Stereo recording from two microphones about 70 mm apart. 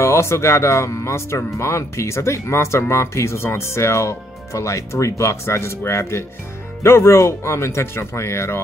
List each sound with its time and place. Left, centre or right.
0.0 s speech: left